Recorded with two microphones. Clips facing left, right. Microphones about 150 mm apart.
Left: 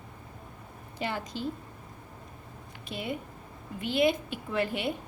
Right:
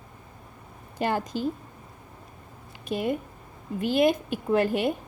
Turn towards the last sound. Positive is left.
turn(degrees=-45)  # may be behind; listen again after turning